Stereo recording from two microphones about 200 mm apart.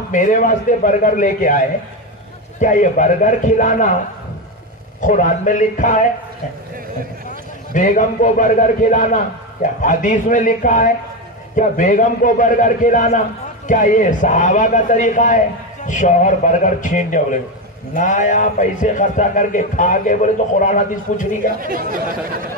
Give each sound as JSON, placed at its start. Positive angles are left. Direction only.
{"t": 0.1, "sound": "a man's voice", "side_deg": 40}
{"t": 2.6, "sound": "a man's voice", "side_deg": 40}
{"t": 5.0, "sound": "a man's voice", "side_deg": 40}
{"t": 7.2, "sound": "a man's voice", "side_deg": 40}
{"t": 21.5, "sound": "speech", "side_deg": -45}